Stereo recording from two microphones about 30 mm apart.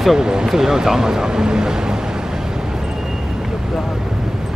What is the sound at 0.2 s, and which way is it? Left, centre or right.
Speech, right.